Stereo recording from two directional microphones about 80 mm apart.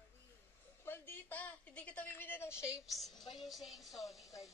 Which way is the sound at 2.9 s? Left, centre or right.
Centre.